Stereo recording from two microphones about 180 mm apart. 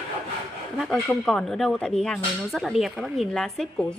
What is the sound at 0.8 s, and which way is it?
Speech, centre (ahead or behind).